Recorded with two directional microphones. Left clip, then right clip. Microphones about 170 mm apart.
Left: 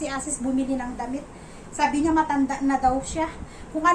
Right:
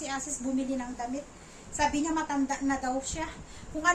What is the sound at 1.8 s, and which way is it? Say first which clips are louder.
A woman's voice: left 7 dB; 10° right (ahead or behind).